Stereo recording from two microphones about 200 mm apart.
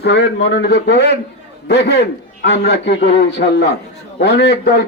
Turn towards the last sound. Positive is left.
turn(degrees=55)  # may be behind; listen again after turning